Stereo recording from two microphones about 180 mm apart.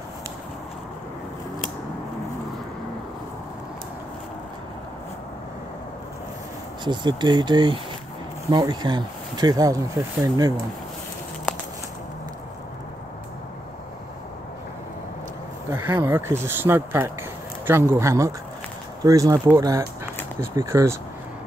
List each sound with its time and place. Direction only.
6.8 s speech: 25° right (ahead or behind)
15.7 s speech: 15° right (ahead or behind)